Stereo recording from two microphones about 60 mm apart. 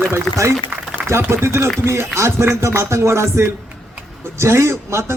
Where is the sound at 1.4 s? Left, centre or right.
Right.